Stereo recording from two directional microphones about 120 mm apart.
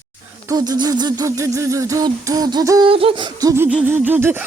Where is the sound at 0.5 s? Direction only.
35° right (ahead or behind).